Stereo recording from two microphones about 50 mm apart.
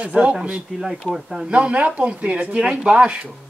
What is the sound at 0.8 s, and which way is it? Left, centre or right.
Speech, centre.